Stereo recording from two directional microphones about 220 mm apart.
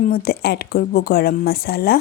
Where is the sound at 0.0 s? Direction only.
40° left (ahead or behind).